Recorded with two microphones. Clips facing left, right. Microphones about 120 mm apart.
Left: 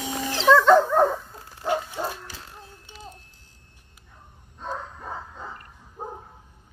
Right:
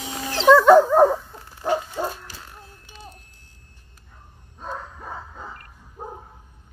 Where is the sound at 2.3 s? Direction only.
25° left (ahead or behind).